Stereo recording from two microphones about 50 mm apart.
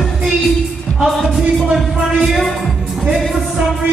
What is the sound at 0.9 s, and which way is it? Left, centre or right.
Music, left.